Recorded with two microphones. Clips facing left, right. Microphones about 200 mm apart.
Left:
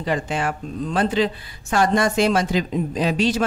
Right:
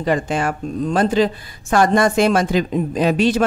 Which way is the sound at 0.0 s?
45° right (ahead or behind).